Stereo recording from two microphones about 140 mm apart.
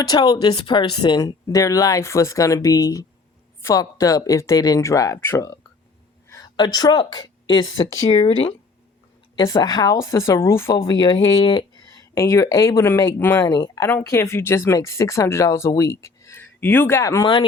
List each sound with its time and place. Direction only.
0.0 s a woman's voice: 30° left (ahead or behind)
9.4 s speech: 25° left (ahead or behind)
11.1 s speech: 40° left (ahead or behind)
12.1 s speech: 20° left (ahead or behind)
13.4 s speech: 30° left (ahead or behind)